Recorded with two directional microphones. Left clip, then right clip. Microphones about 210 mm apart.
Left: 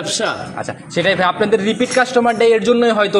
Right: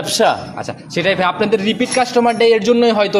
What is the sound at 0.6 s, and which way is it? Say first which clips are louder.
A man's voice: left 1 dB; 10° right (ahead or behind).